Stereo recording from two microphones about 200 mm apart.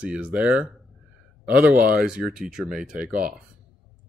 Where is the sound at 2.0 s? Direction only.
Centre (ahead or behind).